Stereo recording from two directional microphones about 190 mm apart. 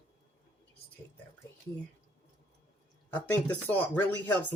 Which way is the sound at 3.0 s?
10° left (ahead or behind).